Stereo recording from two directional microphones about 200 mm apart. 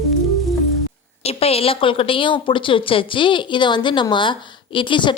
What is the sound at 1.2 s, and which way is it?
A woman's voice, 30° left (ahead or behind).